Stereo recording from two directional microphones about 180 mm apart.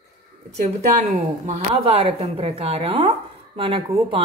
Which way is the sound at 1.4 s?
35° right (ahead or behind).